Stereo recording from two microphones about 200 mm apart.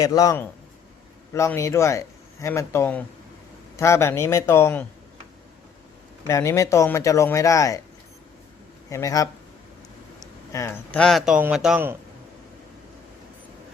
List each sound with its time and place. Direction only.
0.0 s speech: 15° left (ahead or behind)
6.2 s speech: 15° left (ahead or behind)
8.9 s speech: 15° left (ahead or behind)
10.2 s a sound: 15° left (ahead or behind)
10.9 s a man's voice: centre (ahead or behind)